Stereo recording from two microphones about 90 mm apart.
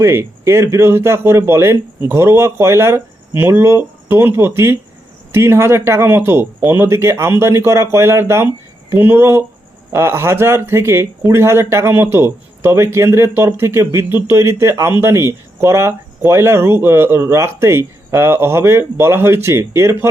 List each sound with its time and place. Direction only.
0.0 s speech: 30° right (ahead or behind)